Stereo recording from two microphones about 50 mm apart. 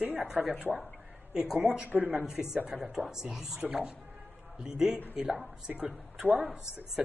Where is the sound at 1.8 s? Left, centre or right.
Right.